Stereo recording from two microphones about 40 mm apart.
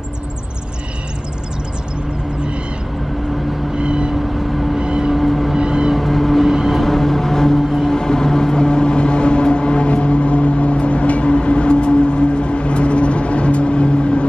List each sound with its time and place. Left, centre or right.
3.7 s vehicle: right
5.1 s vehicle: centre
5.6 s music: right
5.9 s vehicle: centre
6.4 s vehicle: centre
6.8 s a sound: centre
7.8 s vehicle: centre